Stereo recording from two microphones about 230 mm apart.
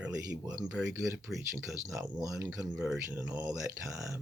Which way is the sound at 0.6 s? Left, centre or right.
Centre.